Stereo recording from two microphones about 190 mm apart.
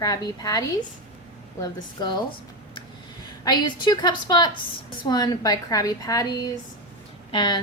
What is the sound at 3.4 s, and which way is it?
A woman's voice, 20° left (ahead or behind).